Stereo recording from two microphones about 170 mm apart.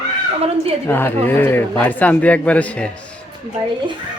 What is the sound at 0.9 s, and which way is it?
A man's voice, 15° left (ahead or behind).